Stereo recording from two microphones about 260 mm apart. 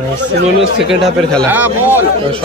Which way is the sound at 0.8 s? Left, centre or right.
Centre.